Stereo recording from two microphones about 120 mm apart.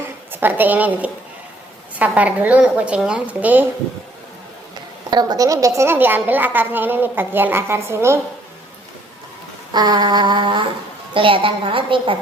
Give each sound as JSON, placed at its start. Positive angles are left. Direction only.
{"t": 0.3, "sound": "a woman's voice", "side_deg": -15}
{"t": 5.1, "sound": "a woman's voice", "side_deg": -35}
{"t": 9.7, "sound": "a sound", "side_deg": -35}
{"t": 11.1, "sound": "a woman's voice", "side_deg": -45}